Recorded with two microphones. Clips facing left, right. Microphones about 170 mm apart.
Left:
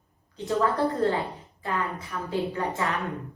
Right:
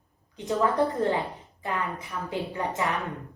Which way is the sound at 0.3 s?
15° right (ahead or behind).